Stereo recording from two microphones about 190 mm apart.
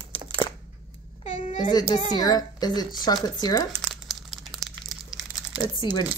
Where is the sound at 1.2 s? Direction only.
40° left (ahead or behind).